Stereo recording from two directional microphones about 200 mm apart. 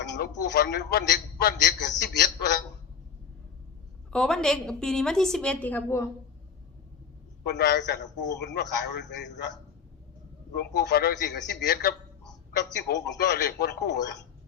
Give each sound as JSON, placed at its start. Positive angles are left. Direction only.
{"t": 0.0, "sound": "a man's voice", "side_deg": 60}
{"t": 4.1, "sound": "a woman's voice", "side_deg": 5}
{"t": 7.4, "sound": "a man's voice", "side_deg": 55}
{"t": 10.5, "sound": "a man's voice", "side_deg": 60}